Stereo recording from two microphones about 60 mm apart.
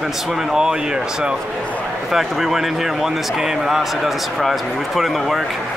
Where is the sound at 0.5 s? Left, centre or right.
Centre.